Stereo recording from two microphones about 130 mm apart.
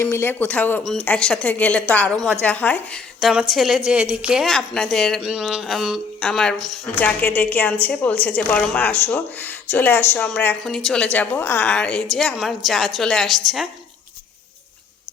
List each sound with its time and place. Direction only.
0.0 s a woman's voice: 20° left (ahead or behind)
3.2 s a woman's voice: centre (ahead or behind)